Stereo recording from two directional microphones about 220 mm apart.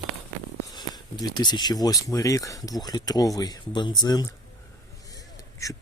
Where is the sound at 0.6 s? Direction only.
20° left (ahead or behind).